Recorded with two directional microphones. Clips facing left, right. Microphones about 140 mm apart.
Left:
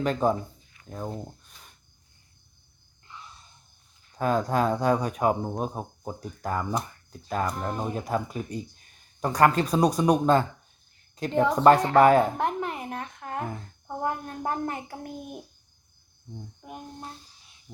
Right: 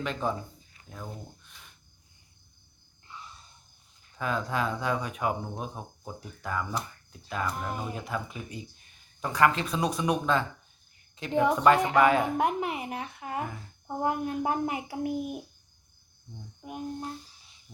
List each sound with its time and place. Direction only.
0.0 s speech: 40° left (ahead or behind)
4.2 s speech: 40° left (ahead or behind)
11.3 s speech: 15° right (ahead or behind)
11.9 s a woman's voice: 45° left (ahead or behind)
12.4 s speech: 10° right (ahead or behind)
16.6 s a sound: centre (ahead or behind)